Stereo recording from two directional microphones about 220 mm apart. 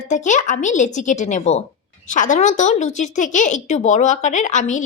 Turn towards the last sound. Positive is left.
turn(degrees=35)  # may be behind; listen again after turning